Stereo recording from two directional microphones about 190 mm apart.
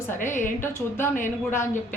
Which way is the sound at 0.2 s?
40° left (ahead or behind).